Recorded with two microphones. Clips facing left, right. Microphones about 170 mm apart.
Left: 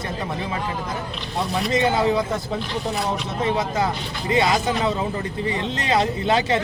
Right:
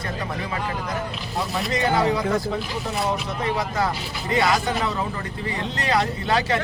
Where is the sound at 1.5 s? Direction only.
Centre (ahead or behind).